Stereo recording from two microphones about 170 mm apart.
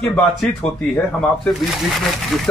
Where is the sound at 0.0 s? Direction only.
Centre (ahead or behind).